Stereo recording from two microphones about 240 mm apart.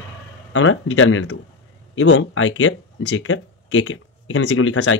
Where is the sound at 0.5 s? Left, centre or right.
Left.